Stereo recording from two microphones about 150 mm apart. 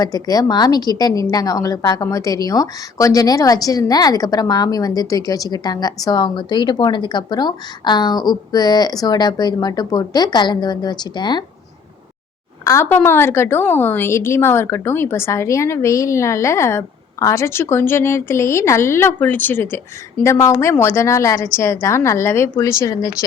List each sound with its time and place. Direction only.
0.0 s a woman's voice: 25° left (ahead or behind)
12.6 s a woman's voice: 15° left (ahead or behind)